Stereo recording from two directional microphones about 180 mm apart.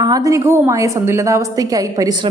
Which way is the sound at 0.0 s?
20° right (ahead or behind).